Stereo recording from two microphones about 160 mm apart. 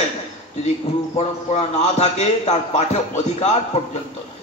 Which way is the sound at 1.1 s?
45° left (ahead or behind).